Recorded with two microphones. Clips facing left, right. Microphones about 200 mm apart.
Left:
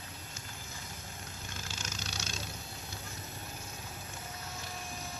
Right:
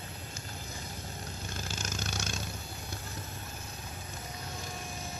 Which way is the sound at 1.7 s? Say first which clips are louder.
Right 6 dB; 45° right (ahead or behind).